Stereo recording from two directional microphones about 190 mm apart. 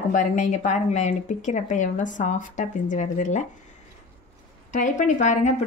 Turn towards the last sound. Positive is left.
turn(degrees=40)  # may be behind; listen again after turning